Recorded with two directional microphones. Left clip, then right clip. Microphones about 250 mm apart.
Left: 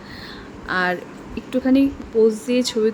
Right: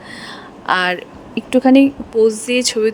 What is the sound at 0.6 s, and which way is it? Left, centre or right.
Speech, right.